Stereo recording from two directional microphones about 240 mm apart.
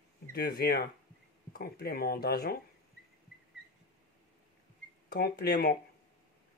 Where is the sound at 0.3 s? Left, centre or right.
Left.